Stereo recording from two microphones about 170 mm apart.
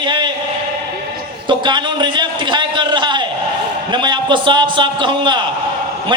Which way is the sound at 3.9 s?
25° right (ahead or behind).